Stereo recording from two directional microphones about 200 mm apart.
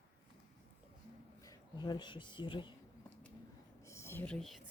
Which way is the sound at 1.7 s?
20° left (ahead or behind).